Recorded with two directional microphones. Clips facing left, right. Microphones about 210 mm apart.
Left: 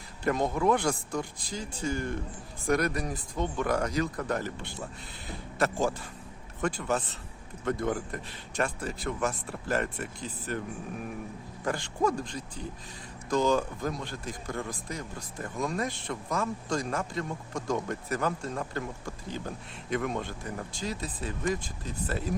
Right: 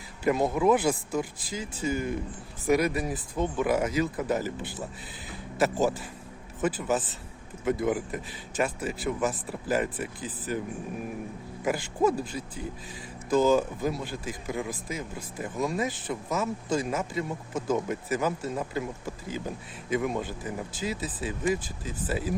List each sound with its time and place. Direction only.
0.3 s speech: 5° right (ahead or behind)
5.8 s speech: 5° right (ahead or behind)
11.6 s speech: 5° right (ahead or behind)